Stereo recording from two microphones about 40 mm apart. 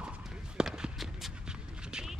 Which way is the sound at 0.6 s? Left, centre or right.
Centre.